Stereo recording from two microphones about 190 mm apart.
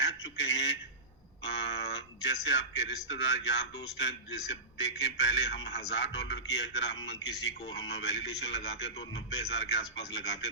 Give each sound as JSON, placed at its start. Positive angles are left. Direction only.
{"t": 0.0, "sound": "honk", "side_deg": 70}
{"t": 1.5, "sound": "a man's voice", "side_deg": 65}